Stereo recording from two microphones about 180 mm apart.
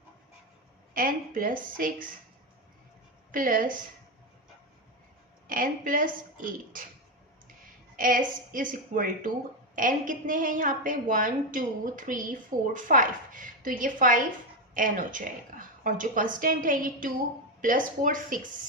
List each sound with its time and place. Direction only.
0.9 s a woman's voice: 50° right (ahead or behind)
3.3 s a woman's voice: 50° right (ahead or behind)
5.5 s a woman's voice: 50° right (ahead or behind)
7.9 s a woman's voice: 50° right (ahead or behind)